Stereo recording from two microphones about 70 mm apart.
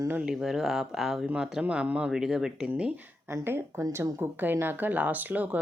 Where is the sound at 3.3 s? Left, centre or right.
Right.